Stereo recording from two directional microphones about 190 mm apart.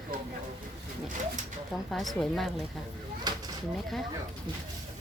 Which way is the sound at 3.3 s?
20° right (ahead or behind).